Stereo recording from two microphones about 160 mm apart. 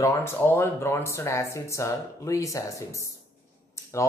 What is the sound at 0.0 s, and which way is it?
Speech, 15° left (ahead or behind).